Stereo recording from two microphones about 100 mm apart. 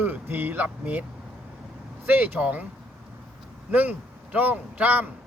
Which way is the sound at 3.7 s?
15° right (ahead or behind).